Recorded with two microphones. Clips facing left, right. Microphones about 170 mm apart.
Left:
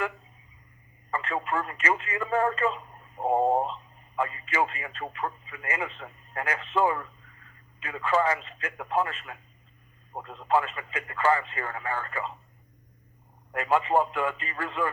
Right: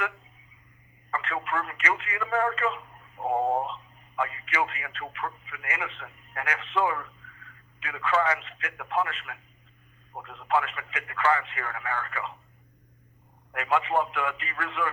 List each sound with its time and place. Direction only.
1.1 s speech: 35° left (ahead or behind)
13.5 s speech: 40° left (ahead or behind)